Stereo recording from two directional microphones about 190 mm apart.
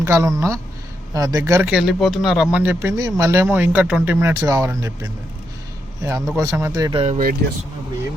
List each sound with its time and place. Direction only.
0.0 s a man's voice: 15° right (ahead or behind)
7.4 s speech: 55° right (ahead or behind)